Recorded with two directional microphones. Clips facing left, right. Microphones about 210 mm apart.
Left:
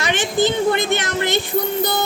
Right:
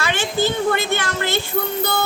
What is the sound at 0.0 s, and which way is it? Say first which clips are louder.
A woman's voice: left 2 dB; 20° left (ahead or behind).